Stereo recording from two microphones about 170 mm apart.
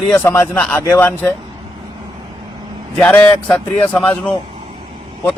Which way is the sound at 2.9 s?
10° left (ahead or behind).